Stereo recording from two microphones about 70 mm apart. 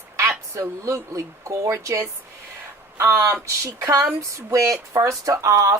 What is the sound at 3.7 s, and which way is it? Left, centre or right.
Speech, right.